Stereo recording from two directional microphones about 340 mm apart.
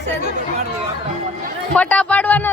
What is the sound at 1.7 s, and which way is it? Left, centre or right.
Speech, centre.